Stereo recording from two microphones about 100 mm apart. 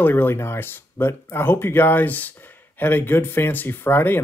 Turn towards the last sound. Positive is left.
turn(degrees=20)  # may be behind; listen again after turning